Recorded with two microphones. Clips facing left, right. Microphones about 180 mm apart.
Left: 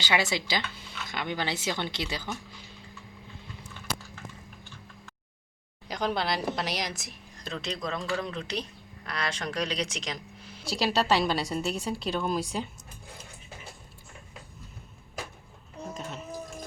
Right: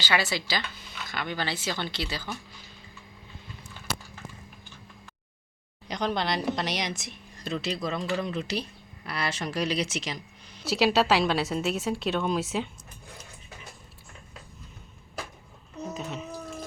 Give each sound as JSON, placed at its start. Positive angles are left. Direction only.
{"t": 0.0, "sound": "speech", "side_deg": 20}
{"t": 5.9, "sound": "speech", "side_deg": 5}
{"t": 16.0, "sound": "a sound", "side_deg": 0}